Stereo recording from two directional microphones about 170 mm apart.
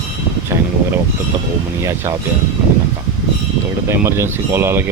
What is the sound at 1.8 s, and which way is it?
Speech, 15° right (ahead or behind).